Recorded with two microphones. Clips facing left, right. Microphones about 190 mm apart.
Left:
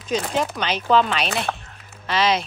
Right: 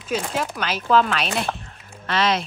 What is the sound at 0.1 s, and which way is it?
Speech, 5° right (ahead or behind).